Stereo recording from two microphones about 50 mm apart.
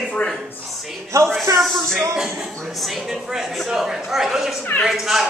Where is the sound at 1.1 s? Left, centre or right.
Right.